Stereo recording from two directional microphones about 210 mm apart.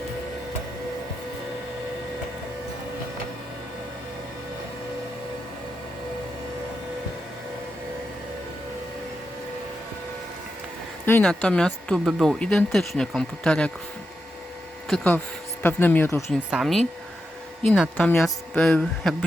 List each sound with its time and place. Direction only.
11.0 s speech: 5° left (ahead or behind)
14.8 s speech: 5° left (ahead or behind)
16.5 s speech: centre (ahead or behind)